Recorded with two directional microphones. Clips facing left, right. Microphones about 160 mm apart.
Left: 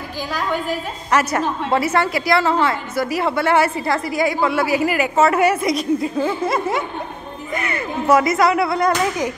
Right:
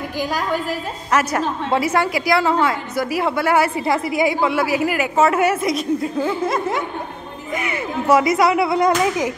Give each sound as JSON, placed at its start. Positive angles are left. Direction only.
{"t": 0.2, "sound": "a woman's voice", "side_deg": -10}
{"t": 3.7, "sound": "speech", "side_deg": -15}
{"t": 4.6, "sound": "a woman's voice", "side_deg": 0}
{"t": 6.2, "sound": "a sound", "side_deg": 5}
{"t": 7.5, "sound": "speech", "side_deg": -5}